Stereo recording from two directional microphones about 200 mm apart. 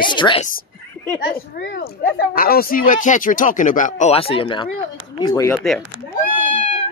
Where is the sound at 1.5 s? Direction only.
55° left (ahead or behind); by 5.5 s 20° left (ahead or behind).